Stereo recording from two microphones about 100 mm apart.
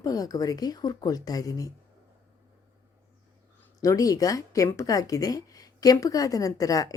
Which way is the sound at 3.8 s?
35° left (ahead or behind).